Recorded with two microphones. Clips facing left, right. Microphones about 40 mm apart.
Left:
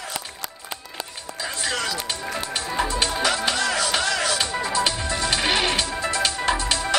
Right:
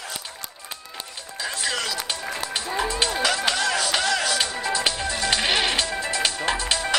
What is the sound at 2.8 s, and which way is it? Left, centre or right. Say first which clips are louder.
Music: left 1 dB; centre.